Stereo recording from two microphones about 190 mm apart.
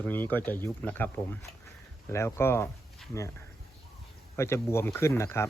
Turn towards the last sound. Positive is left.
turn(degrees=15)  # may be behind; listen again after turning